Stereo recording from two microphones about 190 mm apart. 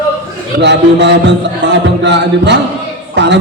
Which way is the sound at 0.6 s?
65° right (ahead or behind).